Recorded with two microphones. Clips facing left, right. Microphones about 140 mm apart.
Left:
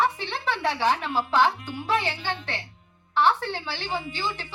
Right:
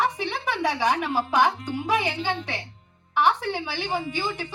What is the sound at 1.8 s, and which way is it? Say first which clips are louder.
Female singing: right 1 dB; 15° right (ahead or behind).